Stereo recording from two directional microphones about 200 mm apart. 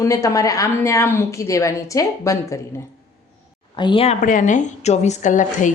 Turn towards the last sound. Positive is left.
turn(degrees=40)  # may be behind; listen again after turning